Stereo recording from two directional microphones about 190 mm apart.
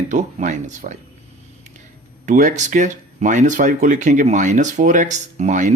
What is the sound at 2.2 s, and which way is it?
Speech, 40° right (ahead or behind).